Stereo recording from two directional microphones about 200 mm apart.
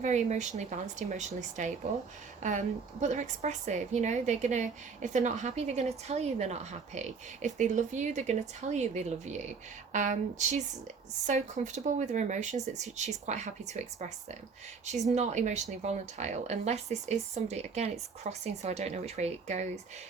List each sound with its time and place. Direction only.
0.0 s a woman's voice: 35° right (ahead or behind)